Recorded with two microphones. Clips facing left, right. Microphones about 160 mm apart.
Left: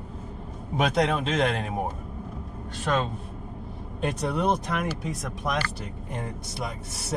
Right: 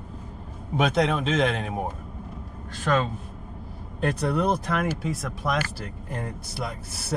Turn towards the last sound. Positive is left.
turn(degrees=0)  # may be behind; listen again after turning